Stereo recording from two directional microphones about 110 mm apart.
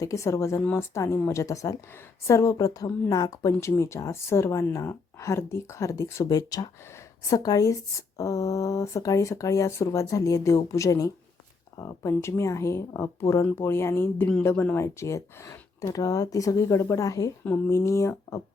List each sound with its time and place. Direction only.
0.0 s a woman's voice: 30° left (ahead or behind)